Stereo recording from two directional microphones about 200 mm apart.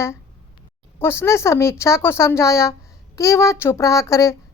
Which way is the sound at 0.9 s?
10° left (ahead or behind).